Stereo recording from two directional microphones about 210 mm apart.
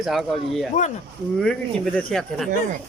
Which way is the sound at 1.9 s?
5° left (ahead or behind).